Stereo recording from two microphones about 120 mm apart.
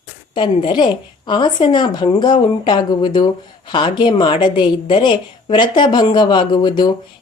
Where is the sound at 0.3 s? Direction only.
40° left (ahead or behind).